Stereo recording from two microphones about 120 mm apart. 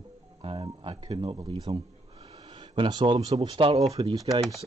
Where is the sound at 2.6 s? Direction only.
45° right (ahead or behind).